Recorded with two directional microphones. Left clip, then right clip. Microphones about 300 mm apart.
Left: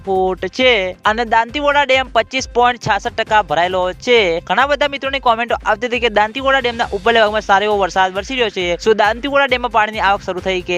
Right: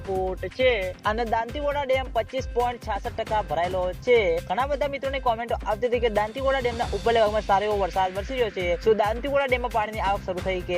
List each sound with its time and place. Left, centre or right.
0.3 s speech: left